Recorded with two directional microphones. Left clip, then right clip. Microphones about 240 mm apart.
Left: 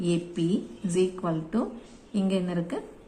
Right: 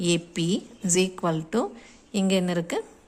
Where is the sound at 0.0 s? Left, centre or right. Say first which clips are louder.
Right 2 dB; right.